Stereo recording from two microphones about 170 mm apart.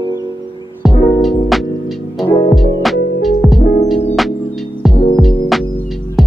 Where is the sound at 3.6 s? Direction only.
50° left (ahead or behind).